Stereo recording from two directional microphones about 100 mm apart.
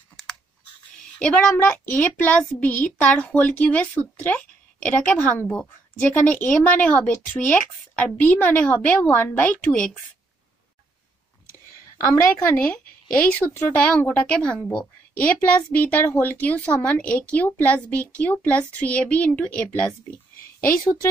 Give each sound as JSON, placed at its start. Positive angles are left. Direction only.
{"t": 1.2, "sound": "a child's voice", "side_deg": 10}
{"t": 12.0, "sound": "a woman's voice", "side_deg": 25}
{"t": 13.3, "sound": "a child's voice", "side_deg": 15}